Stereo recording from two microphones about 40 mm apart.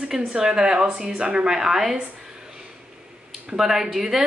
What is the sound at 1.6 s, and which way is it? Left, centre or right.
Speech, centre.